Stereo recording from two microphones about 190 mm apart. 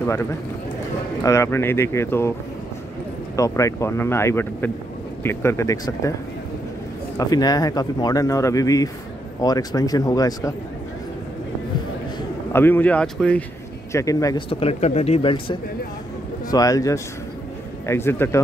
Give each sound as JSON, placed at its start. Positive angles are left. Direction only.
{"t": 0.0, "sound": "speech", "side_deg": 15}
{"t": 3.3, "sound": "speech", "side_deg": 15}
{"t": 7.2, "sound": "speech", "side_deg": 20}
{"t": 12.5, "sound": "speech", "side_deg": 10}
{"t": 13.9, "sound": "speech", "side_deg": 20}
{"t": 14.5, "sound": "speech", "side_deg": 30}